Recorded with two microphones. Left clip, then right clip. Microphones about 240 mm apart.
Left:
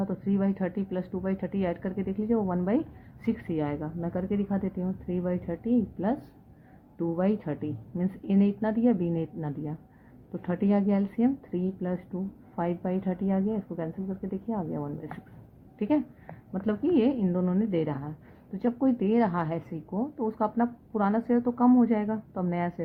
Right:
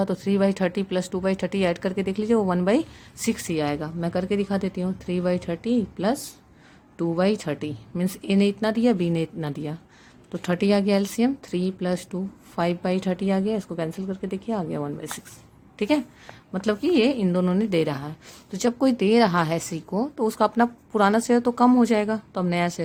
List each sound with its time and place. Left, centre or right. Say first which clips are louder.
0.0 s a woman's voice: right 8 dB; right